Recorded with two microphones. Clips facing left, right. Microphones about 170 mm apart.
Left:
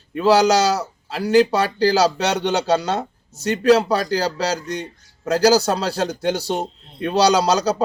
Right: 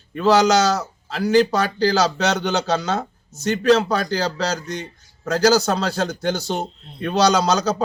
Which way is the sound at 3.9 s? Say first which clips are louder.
Left 1 dB; 35° left (ahead or behind).